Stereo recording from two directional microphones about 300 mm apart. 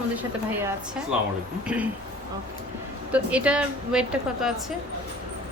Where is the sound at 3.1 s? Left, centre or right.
Centre.